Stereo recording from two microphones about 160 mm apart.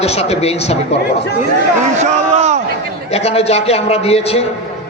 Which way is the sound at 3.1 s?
40° left (ahead or behind).